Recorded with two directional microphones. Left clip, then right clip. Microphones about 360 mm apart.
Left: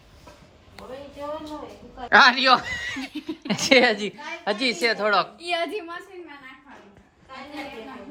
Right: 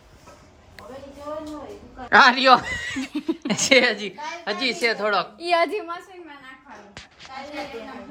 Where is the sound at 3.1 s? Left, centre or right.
Right.